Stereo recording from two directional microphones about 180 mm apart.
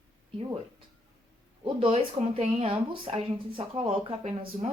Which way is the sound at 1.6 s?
30° right (ahead or behind).